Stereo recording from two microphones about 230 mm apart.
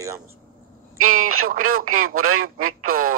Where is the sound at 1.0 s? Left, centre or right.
Right.